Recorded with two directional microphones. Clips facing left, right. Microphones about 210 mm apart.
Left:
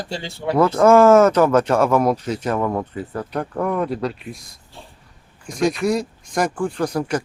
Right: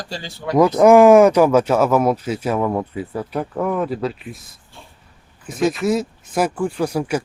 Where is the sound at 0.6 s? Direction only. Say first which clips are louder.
Right 2 dB; 15° right (ahead or behind).